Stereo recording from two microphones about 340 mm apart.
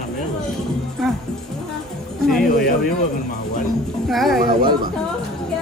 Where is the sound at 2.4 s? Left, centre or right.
Left.